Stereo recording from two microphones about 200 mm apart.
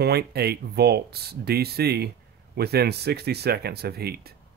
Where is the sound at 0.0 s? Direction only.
55° right (ahead or behind).